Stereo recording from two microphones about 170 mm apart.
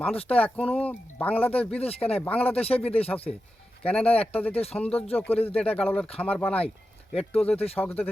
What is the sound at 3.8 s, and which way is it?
Speech, 10° left (ahead or behind).